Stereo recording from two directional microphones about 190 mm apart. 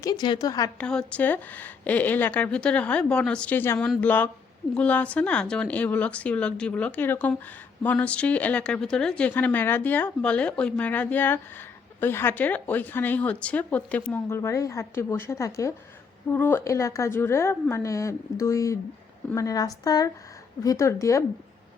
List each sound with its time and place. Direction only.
0.0 s speech: 20° left (ahead or behind)
0.8 s a woman's voice: 5° left (ahead or behind)